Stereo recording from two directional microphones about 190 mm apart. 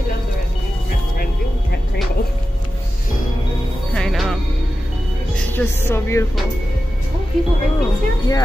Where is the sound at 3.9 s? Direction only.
Centre (ahead or behind).